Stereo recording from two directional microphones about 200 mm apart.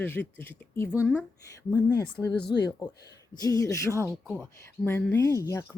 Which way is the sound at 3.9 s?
15° right (ahead or behind).